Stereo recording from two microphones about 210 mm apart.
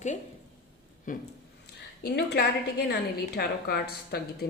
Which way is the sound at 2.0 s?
50° left (ahead or behind).